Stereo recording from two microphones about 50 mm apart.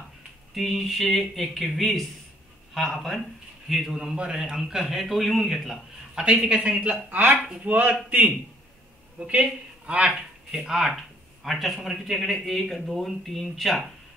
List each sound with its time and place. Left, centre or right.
0.6 s a man's voice: centre
6.1 s speech: centre
7.1 s speech: right
9.2 s speech: right
10.5 s a man's voice: centre